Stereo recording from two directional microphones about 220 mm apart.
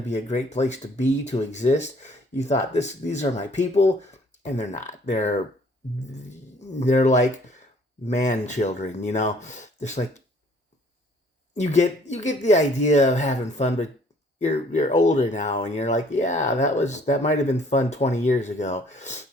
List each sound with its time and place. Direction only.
0.0 s speech: 30° left (ahead or behind)
6.6 s speech: 30° left (ahead or behind)
11.5 s speech: 30° left (ahead or behind)